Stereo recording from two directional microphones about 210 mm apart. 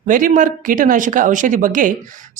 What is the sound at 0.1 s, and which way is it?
Speech, 40° right (ahead or behind).